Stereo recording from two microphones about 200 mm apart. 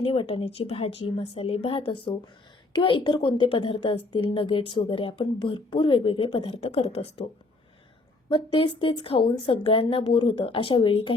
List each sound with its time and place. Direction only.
0.0 s a woman's voice: 30° left (ahead or behind)
8.3 s a woman's voice: 25° left (ahead or behind)